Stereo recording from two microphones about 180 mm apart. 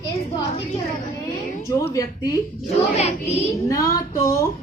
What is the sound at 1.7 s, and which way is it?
Speech, 15° left (ahead or behind).